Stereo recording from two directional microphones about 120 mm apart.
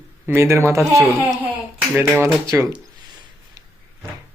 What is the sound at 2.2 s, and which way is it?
Speech, 25° right (ahead or behind).